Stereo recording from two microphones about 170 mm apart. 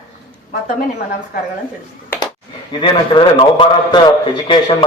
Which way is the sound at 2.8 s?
30° left (ahead or behind).